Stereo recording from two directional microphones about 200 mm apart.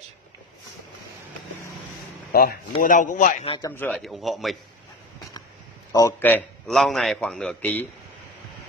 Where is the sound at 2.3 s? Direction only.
50° left (ahead or behind).